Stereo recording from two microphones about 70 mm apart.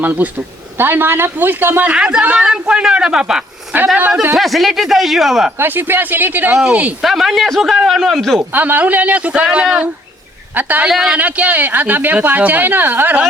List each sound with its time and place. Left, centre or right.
0.0 s speech: right
2.0 s a man's voice: centre
4.4 s a man's voice: centre
5.5 s speech: right
7.0 s a man's voice: centre
8.5 s speech: right
10.8 s a man's voice: centre
11.1 s speech: centre